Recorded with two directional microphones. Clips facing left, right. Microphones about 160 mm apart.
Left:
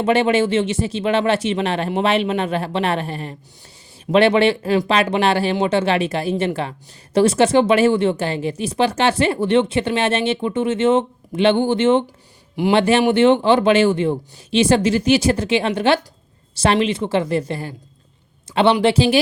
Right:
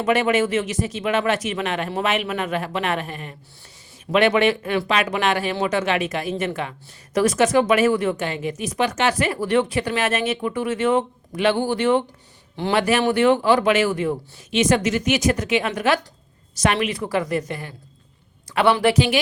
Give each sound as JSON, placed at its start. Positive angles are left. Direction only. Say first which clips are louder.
{"t": 0.0, "sound": "speech", "louder": "left 3 dB", "side_deg": 30}